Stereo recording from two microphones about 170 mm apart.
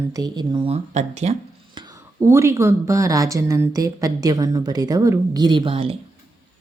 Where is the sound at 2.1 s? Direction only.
15° right (ahead or behind); by 6.0 s 35° right (ahead or behind).